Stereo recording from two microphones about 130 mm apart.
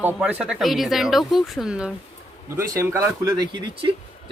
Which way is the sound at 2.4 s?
25° right (ahead or behind).